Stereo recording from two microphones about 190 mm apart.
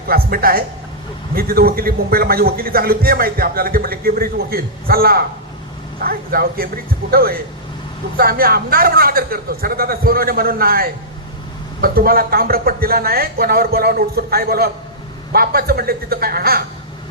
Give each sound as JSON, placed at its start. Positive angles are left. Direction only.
{"t": 0.1, "sound": "a man's voice", "side_deg": -50}